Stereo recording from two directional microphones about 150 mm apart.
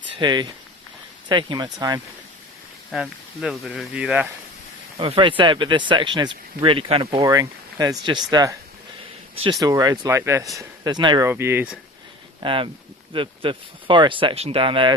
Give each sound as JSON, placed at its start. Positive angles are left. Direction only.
{"t": 0.2, "sound": "speech", "side_deg": -30}
{"t": 2.9, "sound": "speech", "side_deg": -5}
{"t": 4.9, "sound": "speech", "side_deg": -35}
{"t": 10.6, "sound": "speech", "side_deg": -30}
{"t": 11.3, "sound": "speech", "side_deg": -15}
{"t": 12.4, "sound": "speech", "side_deg": -35}